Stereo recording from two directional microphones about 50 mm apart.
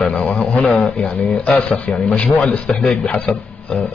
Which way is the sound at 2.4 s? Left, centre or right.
Centre.